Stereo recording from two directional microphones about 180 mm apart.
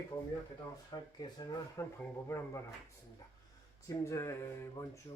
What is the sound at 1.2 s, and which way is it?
Speech, 20° left (ahead or behind).